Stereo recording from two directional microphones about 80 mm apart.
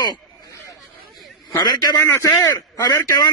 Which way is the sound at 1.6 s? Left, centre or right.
Left.